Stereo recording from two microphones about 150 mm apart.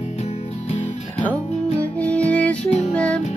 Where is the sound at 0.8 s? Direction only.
10° left (ahead or behind).